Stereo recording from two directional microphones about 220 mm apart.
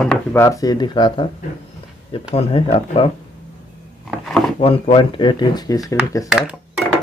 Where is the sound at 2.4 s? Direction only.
25° left (ahead or behind).